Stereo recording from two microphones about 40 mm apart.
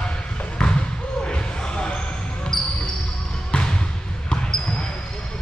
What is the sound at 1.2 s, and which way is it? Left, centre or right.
Basketball bounce, left.